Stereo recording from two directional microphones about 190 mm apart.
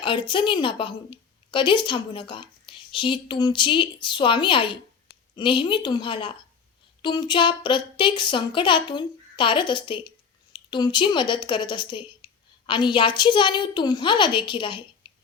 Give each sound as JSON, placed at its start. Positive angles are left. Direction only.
{"t": 0.0, "sound": "a woman's voice", "side_deg": 25}